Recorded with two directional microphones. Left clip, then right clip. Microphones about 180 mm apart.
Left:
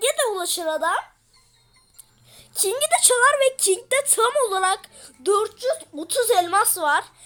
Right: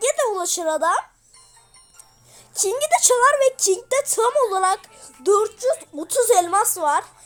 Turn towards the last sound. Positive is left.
turn(degrees=-10)  # may be behind; listen again after turning